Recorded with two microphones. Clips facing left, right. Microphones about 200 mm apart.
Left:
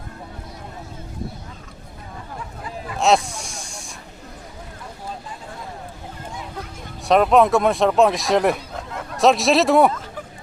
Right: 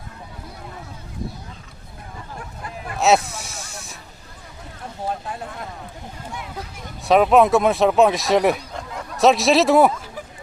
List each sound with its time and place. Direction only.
2.6 s a sound: 60° right (ahead or behind)
3.0 s snake: 5° right (ahead or behind)
5.0 s vehicle: 65° right (ahead or behind)
7.0 s speech: centre (ahead or behind)